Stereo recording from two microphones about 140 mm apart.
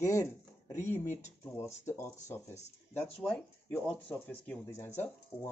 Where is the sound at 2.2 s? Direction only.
55° left (ahead or behind).